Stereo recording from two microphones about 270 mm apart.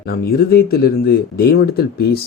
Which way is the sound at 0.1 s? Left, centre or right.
Left.